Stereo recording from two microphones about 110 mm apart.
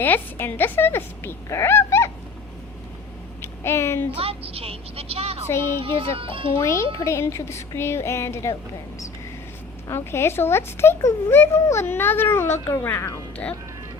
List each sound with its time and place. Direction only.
0.0 s speech: 20° left (ahead or behind)
3.4 s a sound: 25° left (ahead or behind)
4.1 s a woman's voice: 60° right (ahead or behind)
5.5 s speech: 25° left (ahead or behind)
5.8 s a woman's voice: 55° right (ahead or behind)
6.6 s speech: 25° left (ahead or behind)
9.9 s speech: 25° left (ahead or behind)